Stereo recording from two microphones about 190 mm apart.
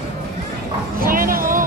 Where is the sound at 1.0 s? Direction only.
50° right (ahead or behind).